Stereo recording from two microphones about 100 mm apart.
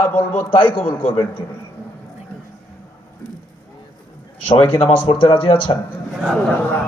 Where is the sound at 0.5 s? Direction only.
55° left (ahead or behind).